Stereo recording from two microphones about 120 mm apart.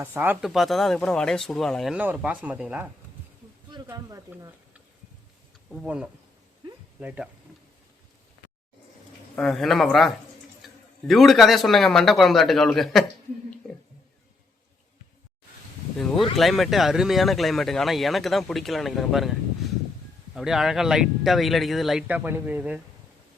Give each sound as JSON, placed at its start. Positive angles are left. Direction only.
{"t": 0.0, "sound": "speech", "side_deg": -15}
{"t": 0.4, "sound": "speech", "side_deg": 0}
{"t": 1.9, "sound": "speech", "side_deg": -10}
{"t": 5.7, "sound": "speech", "side_deg": -10}
{"t": 9.3, "sound": "speech", "side_deg": 5}
{"t": 16.0, "sound": "speech", "side_deg": 5}
{"t": 22.0, "sound": "speech", "side_deg": -15}